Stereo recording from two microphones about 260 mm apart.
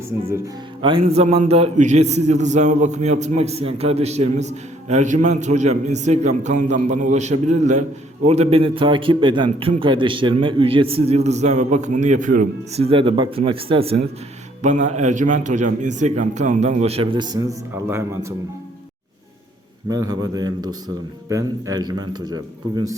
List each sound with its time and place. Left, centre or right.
0.3 s a man's voice: centre
19.9 s a man's voice: centre